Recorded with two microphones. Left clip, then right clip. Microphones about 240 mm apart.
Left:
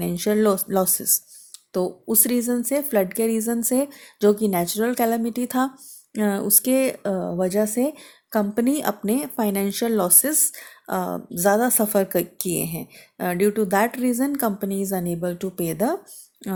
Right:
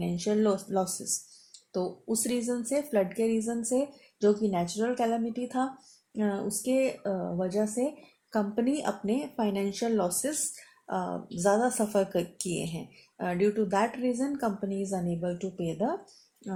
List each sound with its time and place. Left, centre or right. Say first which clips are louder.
0.0 s speech: left 7 dB; left